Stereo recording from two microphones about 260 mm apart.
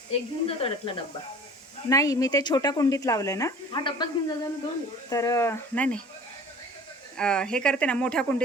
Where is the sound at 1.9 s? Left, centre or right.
Centre.